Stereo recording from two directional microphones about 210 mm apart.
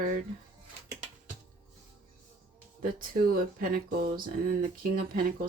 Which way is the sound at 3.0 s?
45° right (ahead or behind).